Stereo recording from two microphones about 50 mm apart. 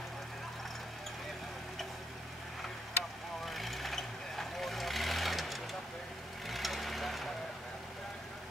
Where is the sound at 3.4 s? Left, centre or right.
Centre.